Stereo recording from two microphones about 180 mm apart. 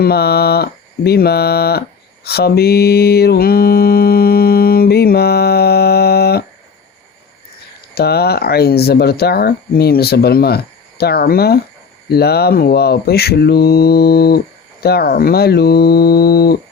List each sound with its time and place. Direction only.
0.0 s speech: 60° left (ahead or behind)
2.2 s mantra: 60° left (ahead or behind)
7.9 s speech: 60° left (ahead or behind)